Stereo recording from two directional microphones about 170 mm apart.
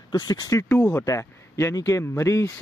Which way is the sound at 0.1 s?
25° left (ahead or behind).